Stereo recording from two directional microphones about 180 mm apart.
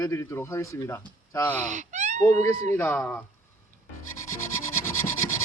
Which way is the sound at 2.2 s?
15° left (ahead or behind).